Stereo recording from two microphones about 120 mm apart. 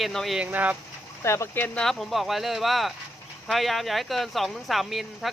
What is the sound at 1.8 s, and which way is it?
Speech, centre (ahead or behind).